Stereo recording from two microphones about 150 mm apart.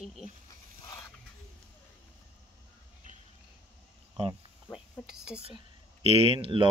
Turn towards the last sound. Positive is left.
turn(degrees=-35)  # may be behind; listen again after turning